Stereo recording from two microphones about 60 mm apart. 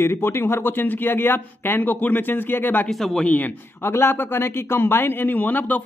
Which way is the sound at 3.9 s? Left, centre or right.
Left.